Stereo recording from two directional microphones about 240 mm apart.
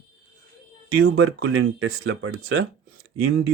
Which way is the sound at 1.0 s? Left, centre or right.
Right.